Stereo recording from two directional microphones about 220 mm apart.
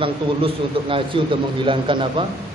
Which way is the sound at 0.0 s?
25° right (ahead or behind).